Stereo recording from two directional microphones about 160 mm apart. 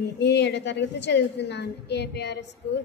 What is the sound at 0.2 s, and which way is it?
A woman's voice, 90° left.